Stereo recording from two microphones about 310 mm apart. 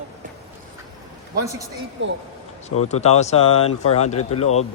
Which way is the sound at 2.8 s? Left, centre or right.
Left.